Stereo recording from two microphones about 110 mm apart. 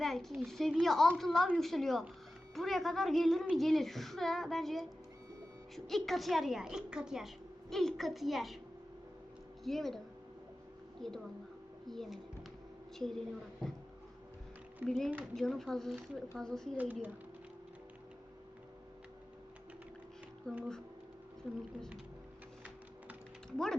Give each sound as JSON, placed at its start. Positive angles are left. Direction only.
{"t": 0.0, "sound": "a woman's voice", "side_deg": 0}
{"t": 9.6, "sound": "a woman's voice", "side_deg": 0}
{"t": 11.0, "sound": "a woman's voice", "side_deg": 5}
{"t": 14.8, "sound": "a woman's voice", "side_deg": 0}
{"t": 16.7, "sound": "speech", "side_deg": -15}
{"t": 20.5, "sound": "a woman's voice", "side_deg": 5}
{"t": 23.5, "sound": "speech", "side_deg": 5}